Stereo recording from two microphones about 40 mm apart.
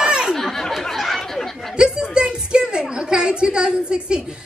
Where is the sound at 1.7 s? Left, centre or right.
Right.